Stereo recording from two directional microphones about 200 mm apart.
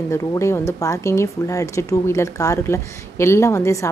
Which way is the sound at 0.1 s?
15° left (ahead or behind).